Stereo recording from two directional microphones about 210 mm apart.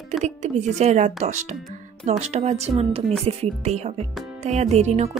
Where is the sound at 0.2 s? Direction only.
35° right (ahead or behind).